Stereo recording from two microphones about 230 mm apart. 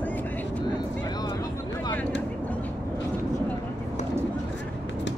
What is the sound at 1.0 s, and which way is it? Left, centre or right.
Vehicle, centre.